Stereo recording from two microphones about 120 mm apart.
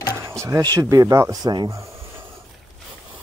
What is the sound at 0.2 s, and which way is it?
Speech, 25° right (ahead or behind).